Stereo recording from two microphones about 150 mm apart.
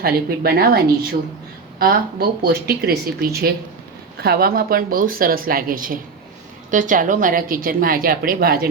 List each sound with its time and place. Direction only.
0.0 s speech: 90° right
1.8 s a woman's voice: 90° right